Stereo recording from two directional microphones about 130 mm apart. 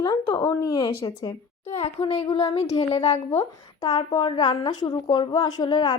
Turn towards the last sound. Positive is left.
turn(degrees=35)  # may be behind; listen again after turning